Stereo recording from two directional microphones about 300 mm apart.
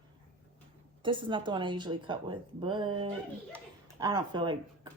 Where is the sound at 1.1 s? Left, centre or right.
Centre.